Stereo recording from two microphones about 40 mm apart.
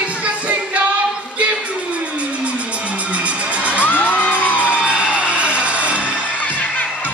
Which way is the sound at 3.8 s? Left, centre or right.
Left.